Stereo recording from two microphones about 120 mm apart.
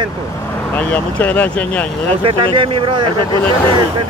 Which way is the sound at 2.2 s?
45° right (ahead or behind).